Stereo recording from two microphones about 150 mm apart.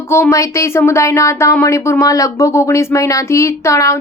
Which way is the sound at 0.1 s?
20° left (ahead or behind).